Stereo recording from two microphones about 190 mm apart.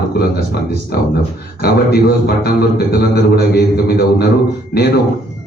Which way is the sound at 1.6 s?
55° left (ahead or behind).